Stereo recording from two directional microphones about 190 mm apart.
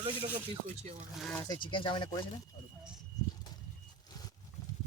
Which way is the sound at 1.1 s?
Centre (ahead or behind).